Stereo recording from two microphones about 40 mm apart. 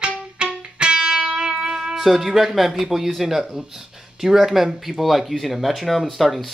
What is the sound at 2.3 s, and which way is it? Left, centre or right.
Speech, centre.